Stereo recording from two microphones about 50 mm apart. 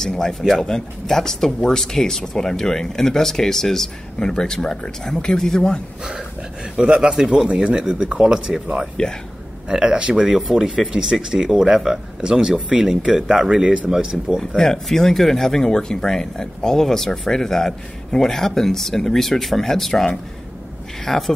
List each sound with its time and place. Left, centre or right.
0.0 s speech: centre
6.8 s speech: centre
9.0 s speech: centre
9.7 s speech: centre
14.6 s speech: centre